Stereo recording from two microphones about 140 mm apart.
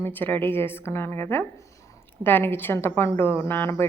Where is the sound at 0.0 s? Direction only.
15° left (ahead or behind).